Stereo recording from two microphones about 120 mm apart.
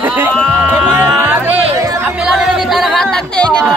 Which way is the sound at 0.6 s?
10° right (ahead or behind).